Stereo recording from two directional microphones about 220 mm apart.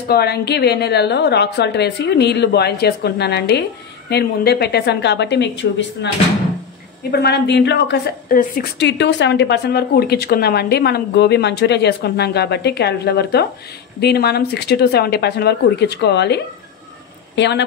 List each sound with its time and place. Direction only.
0.1 s a woman's voice: 50° left (ahead or behind)
7.1 s a woman's voice: 50° left (ahead or behind)
17.4 s a woman's voice: 50° left (ahead or behind)